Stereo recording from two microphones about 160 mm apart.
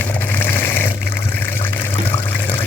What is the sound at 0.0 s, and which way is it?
Water, 10° left (ahead or behind).